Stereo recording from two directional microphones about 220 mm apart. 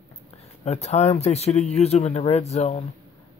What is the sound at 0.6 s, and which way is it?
Speech, 30° left (ahead or behind).